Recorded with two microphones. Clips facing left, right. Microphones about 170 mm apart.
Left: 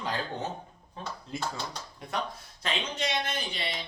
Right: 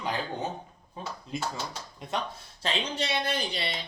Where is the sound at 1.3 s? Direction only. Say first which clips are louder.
Right 1 dB; 20° right (ahead or behind).